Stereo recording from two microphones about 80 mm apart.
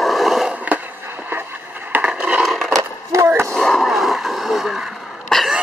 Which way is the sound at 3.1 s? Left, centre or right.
Right.